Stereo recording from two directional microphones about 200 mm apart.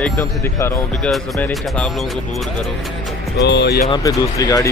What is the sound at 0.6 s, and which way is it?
Speech, 10° left (ahead or behind).